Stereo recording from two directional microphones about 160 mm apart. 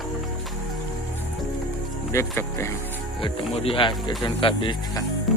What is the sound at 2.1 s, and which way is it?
Speech, 15° left (ahead or behind).